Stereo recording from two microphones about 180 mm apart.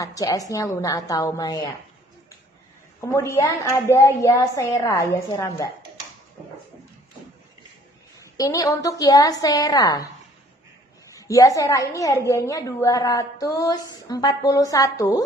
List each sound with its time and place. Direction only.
0.0 s a woman's voice: 20° left (ahead or behind)
3.0 s a woman's voice: 15° left (ahead or behind)
8.2 s a woman's voice: 20° left (ahead or behind)
11.1 s a woman's voice: 20° left (ahead or behind)